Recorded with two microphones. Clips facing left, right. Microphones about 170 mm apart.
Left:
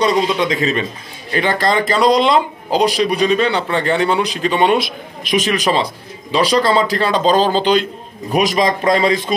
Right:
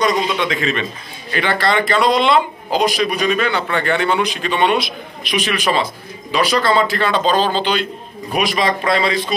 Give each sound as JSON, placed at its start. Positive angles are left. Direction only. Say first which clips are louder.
{"t": 0.0, "sound": "a man's voice", "louder": "left 2 dB", "side_deg": 35}
{"t": 4.6, "sound": "a man's voice", "louder": "left 2 dB", "side_deg": 45}